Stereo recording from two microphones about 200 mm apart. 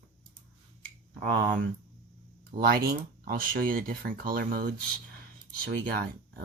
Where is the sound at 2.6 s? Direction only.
50° right (ahead or behind).